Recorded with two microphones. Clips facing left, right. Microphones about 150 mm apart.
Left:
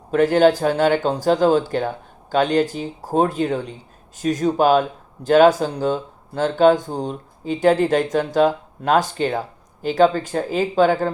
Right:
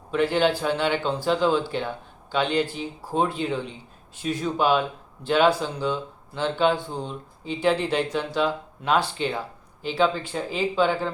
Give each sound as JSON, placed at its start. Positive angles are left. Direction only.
{"t": 0.1, "sound": "speech", "side_deg": 45}